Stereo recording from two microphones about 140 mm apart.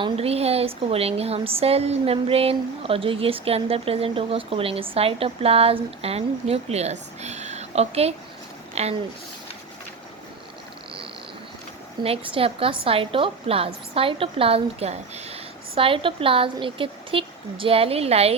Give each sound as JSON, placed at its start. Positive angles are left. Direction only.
{"t": 0.0, "sound": "speech", "side_deg": -45}
{"t": 12.0, "sound": "a woman's voice", "side_deg": -45}